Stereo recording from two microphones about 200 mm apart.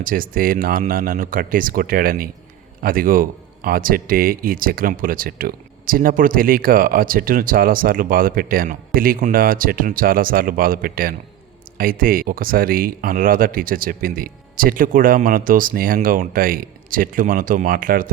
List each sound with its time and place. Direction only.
0.0 s a man's voice: 45° right (ahead or behind)